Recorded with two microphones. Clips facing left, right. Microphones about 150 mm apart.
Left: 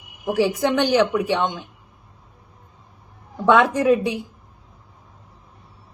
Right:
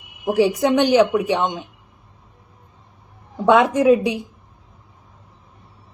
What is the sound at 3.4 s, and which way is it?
Speech, 20° right (ahead or behind).